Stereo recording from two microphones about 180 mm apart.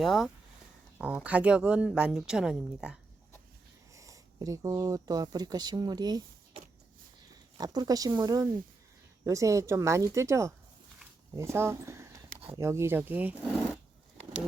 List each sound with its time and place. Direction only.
0.0 s speech: centre (ahead or behind)
3.9 s speech: 20° right (ahead or behind)
7.6 s speech: 20° right (ahead or behind)